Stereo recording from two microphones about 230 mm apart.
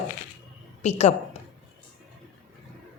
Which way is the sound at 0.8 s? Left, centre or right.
Left.